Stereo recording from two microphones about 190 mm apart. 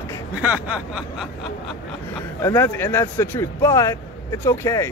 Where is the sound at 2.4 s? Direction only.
15° left (ahead or behind).